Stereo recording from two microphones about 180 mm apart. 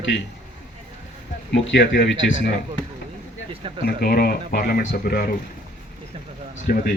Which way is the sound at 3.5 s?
30° right (ahead or behind).